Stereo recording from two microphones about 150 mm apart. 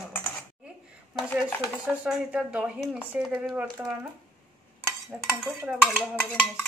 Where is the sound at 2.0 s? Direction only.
5° right (ahead or behind).